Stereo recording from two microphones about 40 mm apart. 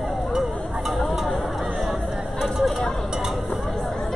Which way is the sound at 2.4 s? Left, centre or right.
Centre.